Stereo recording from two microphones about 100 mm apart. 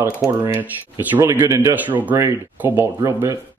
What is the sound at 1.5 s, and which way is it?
Speech, 30° right (ahead or behind).